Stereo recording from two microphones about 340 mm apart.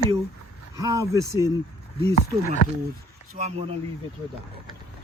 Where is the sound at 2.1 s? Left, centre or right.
Left.